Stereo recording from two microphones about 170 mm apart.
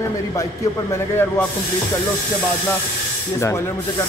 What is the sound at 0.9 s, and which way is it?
Speech, 15° left (ahead or behind).